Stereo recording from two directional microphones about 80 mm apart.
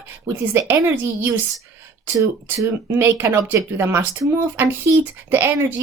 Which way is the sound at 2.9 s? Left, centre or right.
Right.